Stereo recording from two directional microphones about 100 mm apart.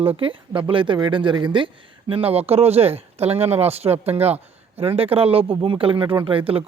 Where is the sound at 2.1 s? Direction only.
70° right (ahead or behind).